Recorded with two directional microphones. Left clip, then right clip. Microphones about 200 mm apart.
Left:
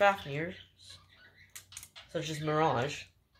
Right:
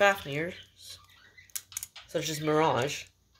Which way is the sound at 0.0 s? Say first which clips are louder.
Right 3 dB; 45° right (ahead or behind).